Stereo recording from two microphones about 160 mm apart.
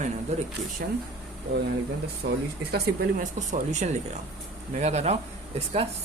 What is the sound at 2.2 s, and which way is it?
Speech, 65° right (ahead or behind).